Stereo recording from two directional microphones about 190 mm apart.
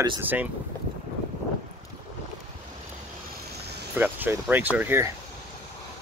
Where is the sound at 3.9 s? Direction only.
10° right (ahead or behind).